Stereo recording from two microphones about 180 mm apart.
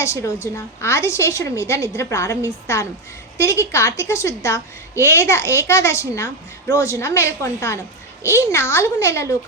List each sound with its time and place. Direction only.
0.0 s a woman's voice: 15° left (ahead or behind)